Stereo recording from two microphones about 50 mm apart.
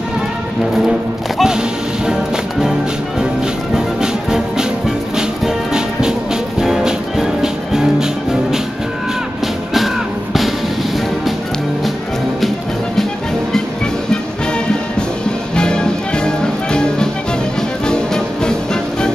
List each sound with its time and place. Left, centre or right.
1.4 s smash: centre
3.7 s music: centre
15.5 s music: centre